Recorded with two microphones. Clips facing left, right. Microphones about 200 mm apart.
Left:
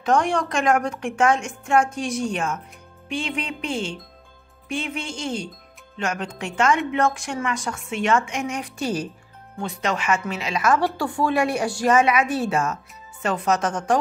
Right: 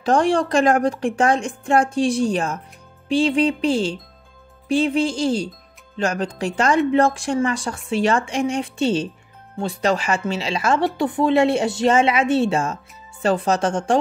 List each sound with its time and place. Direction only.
0.0 s a woman's voice: 30° right (ahead or behind)